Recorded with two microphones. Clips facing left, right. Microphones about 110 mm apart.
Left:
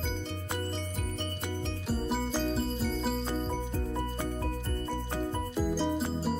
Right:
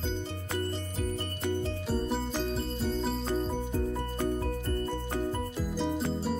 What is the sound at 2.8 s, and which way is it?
Music, centre (ahead or behind).